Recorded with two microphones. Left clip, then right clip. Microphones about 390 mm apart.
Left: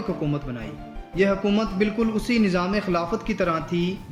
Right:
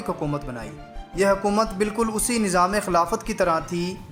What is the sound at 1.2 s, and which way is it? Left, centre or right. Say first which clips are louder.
A man's voice: right 2 dB; centre.